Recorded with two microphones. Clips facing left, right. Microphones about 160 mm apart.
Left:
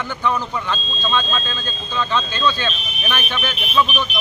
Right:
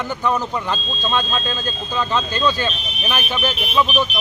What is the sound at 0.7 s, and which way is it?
Speech, 10° right (ahead or behind).